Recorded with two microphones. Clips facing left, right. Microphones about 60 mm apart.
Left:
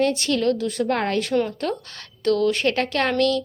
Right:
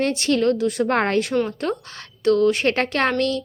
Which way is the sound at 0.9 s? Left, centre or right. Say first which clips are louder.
Right 3 dB; right.